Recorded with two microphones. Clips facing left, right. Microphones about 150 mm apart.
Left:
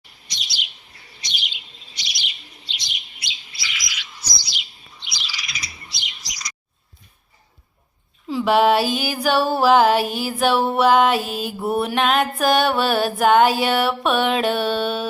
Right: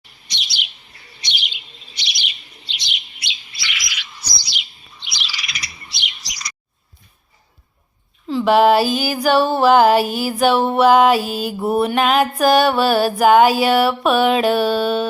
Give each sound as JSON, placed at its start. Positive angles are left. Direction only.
{"t": 0.3, "sound": "chirp", "side_deg": -65}
{"t": 4.4, "sound": "bird", "side_deg": -75}
{"t": 8.3, "sound": "a sound", "side_deg": 5}
{"t": 9.2, "sound": "music", "side_deg": 0}